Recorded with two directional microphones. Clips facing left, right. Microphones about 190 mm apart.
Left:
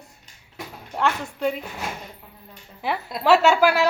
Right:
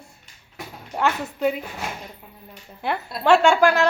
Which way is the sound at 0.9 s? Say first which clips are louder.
Right 1 dB; 5° right (ahead or behind).